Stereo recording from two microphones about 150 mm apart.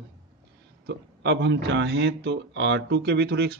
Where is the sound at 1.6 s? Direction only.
90° right.